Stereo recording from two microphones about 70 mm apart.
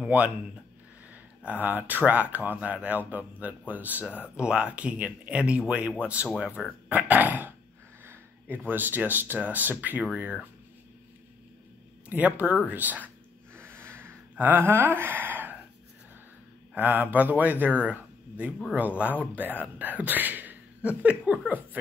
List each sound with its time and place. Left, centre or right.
0.0 s speech: right
12.1 s speech: right
13.6 s snort: right
14.3 s speech: right
16.7 s speech: right
18.8 s speech: right